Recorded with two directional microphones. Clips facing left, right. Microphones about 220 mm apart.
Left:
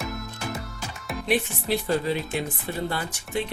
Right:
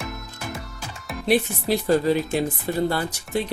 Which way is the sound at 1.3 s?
40° right (ahead or behind).